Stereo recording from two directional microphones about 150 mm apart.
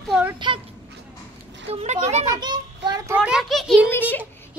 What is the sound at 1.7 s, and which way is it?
Speech, 45° right (ahead or behind).